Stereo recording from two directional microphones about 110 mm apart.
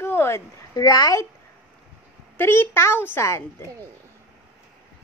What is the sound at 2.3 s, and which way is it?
A woman's voice, 20° left (ahead or behind).